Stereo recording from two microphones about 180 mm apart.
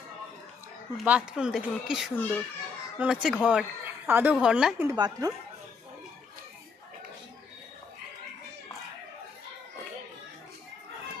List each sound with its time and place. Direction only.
0.9 s speech: 5° right (ahead or behind)
4.8 s speech: 20° right (ahead or behind)